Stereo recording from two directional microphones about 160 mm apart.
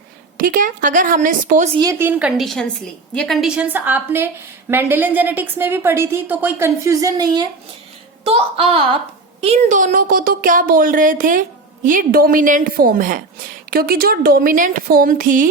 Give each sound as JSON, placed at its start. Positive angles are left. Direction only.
{"t": 0.3, "sound": "speech", "side_deg": -60}
{"t": 1.8, "sound": "a woman's voice", "side_deg": -15}
{"t": 8.2, "sound": "a woman's voice", "side_deg": -35}